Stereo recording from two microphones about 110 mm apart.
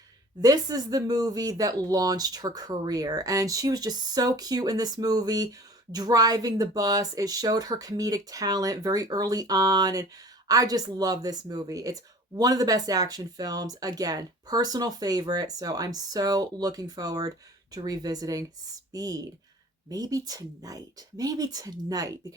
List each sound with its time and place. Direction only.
0.4 s speech: 35° right (ahead or behind)